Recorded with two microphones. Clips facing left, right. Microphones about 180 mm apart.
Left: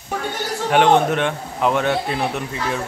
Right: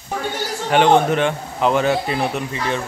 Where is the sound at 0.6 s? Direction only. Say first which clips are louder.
Right 1 dB; centre (ahead or behind).